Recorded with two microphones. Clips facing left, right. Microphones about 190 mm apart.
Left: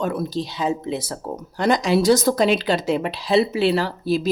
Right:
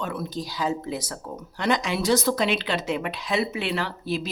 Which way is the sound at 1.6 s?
40° left (ahead or behind).